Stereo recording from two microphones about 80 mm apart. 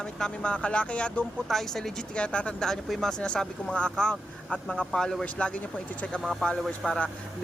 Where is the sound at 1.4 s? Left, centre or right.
Centre.